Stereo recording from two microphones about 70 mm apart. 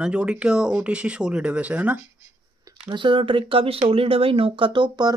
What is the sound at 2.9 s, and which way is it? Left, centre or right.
Speech, right.